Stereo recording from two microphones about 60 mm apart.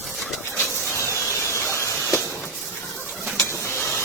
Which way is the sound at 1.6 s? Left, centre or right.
Left.